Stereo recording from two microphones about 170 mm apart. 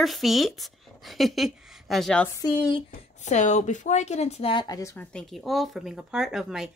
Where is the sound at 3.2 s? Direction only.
45° left (ahead or behind); by 5.0 s 20° left (ahead or behind).